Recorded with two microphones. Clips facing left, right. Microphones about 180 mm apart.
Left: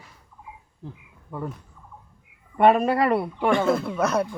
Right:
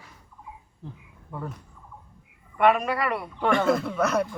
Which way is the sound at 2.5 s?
35° left (ahead or behind).